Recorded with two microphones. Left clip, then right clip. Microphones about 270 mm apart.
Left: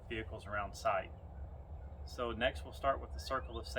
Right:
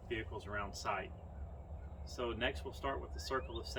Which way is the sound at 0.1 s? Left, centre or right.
Centre.